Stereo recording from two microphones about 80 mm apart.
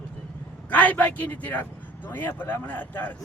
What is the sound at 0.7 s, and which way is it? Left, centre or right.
Speech, centre.